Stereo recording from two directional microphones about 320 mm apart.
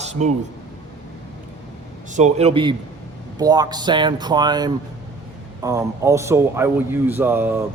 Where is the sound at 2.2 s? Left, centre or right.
Right.